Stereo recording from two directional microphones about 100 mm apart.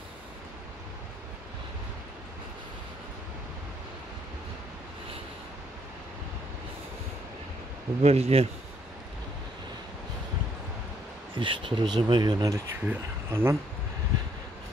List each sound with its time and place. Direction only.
8.0 s speech: 90° right
11.3 s speech: 60° right (ahead or behind); by 12.6 s 40° right (ahead or behind)
12.8 s speech: 20° right (ahead or behind)